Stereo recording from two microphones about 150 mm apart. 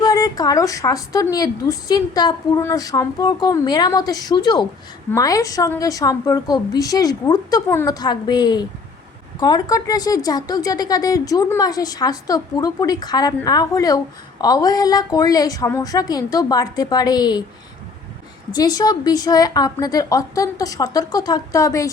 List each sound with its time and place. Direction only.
0.0 s a woman's voice: 25° left (ahead or behind)
18.5 s a woman's voice: 25° left (ahead or behind)